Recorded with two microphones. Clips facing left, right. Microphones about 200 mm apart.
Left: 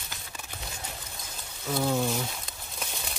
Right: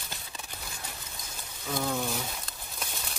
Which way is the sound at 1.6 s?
15° left (ahead or behind).